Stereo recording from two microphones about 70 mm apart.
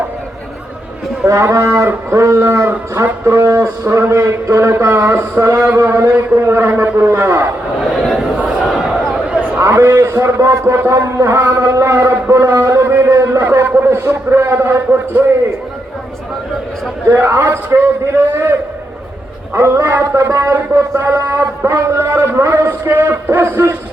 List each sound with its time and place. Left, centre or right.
1.3 s a man's voice: right
8.2 s a sound: centre
9.6 s a man's voice: right
12.3 s a sound: right
13.8 s a man's voice: right
17.1 s a man's voice: right
19.5 s a man's voice: right